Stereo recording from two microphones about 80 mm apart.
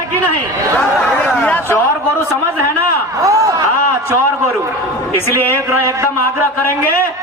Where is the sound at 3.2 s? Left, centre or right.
Right.